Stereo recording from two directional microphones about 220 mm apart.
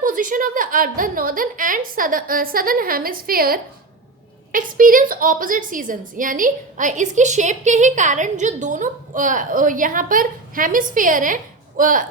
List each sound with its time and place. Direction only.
0.0 s a woman's voice: 40° right (ahead or behind)